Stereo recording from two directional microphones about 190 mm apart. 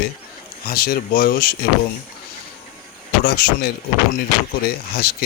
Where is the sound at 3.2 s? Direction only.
55° left (ahead or behind).